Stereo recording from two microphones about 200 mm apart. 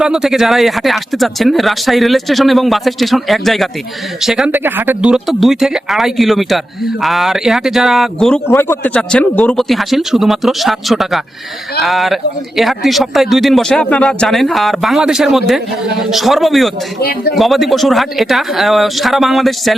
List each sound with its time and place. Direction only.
0.0 s a man's voice: 5° right (ahead or behind)
8.4 s a man's voice: 10° left (ahead or behind)
17.0 s speech: 50° left (ahead or behind)
17.3 s a man's voice: centre (ahead or behind)